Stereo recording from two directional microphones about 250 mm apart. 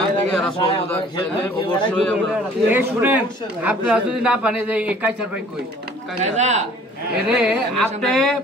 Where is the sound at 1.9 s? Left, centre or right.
Centre.